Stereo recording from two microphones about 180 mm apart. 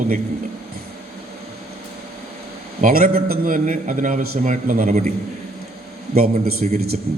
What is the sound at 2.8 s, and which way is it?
A man's voice, 55° right (ahead or behind).